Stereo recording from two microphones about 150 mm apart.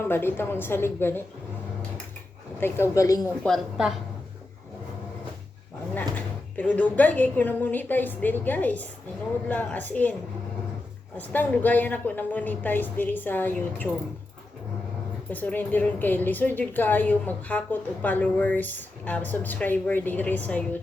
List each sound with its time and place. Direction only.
0.0 s a woman's voice: 15° left (ahead or behind)
2.6 s a woman's voice: 15° left (ahead or behind)
3.4 s a woman's voice: centre (ahead or behind)
5.9 s a woman's voice: 10° left (ahead or behind)
11.3 s a woman's voice: 10° left (ahead or behind)
15.3 s a woman's voice: 10° left (ahead or behind)